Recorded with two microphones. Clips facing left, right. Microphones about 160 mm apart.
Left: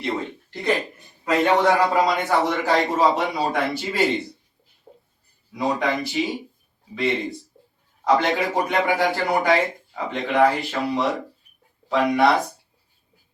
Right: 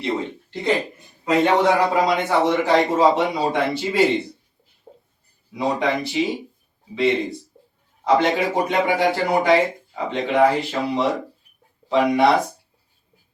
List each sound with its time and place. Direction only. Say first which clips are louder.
0.0 s a sound: right 2 dB; 25° right (ahead or behind)
1.2 s speech: right 1 dB; 20° right (ahead or behind)
4.9 s a sound: right 2 dB; 10° right (ahead or behind)
5.5 s speech: right 1 dB; 20° right (ahead or behind)
7.2 s speech: right 3 dB; centre (ahead or behind)
8.4 s speech: right 2 dB; 20° right (ahead or behind)